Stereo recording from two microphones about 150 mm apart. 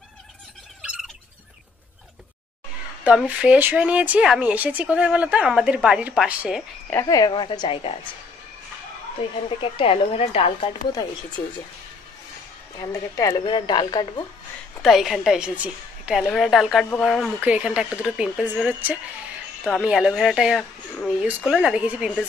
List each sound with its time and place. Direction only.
0.8 s squawk: 5° right (ahead or behind)
3.0 s speech: 10° right (ahead or behind)
6.9 s speech: 20° left (ahead or behind)
9.2 s speech: 35° left (ahead or behind)
10.9 s speech: 25° left (ahead or behind)
12.7 s speech: 25° left (ahead or behind)
14.8 s a woman's voice: centre (ahead or behind)